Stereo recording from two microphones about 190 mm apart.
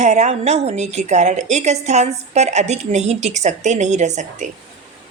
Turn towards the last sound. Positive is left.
turn(degrees=-40)  # may be behind; listen again after turning